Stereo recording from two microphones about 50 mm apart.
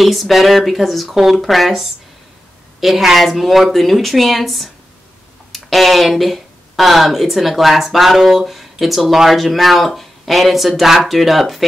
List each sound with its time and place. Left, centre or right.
0.0 s speech: centre